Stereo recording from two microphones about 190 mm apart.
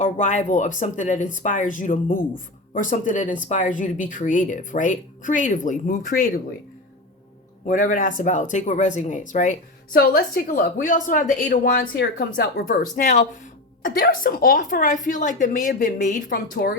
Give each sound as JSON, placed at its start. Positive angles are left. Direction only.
{"t": 0.0, "sound": "speech", "side_deg": 40}
{"t": 7.7, "sound": "speech", "side_deg": 45}